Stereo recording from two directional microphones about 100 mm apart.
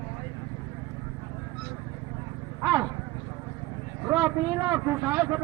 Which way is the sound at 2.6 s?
30° right (ahead or behind).